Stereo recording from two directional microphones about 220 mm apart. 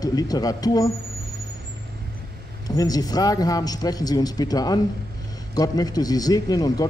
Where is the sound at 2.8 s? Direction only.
15° left (ahead or behind).